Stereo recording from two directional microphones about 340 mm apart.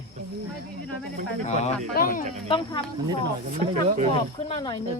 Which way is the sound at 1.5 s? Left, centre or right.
Centre.